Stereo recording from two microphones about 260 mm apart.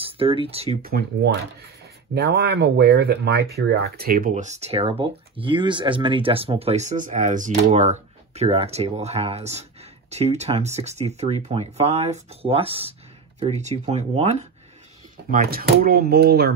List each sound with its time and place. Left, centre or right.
0.0 s speech: right
0.8 s speech: right